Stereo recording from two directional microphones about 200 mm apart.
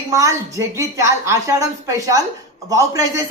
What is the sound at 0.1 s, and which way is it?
A woman's voice, 15° right (ahead or behind).